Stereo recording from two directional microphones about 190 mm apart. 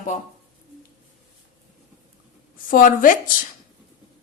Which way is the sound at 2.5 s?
45° left (ahead or behind).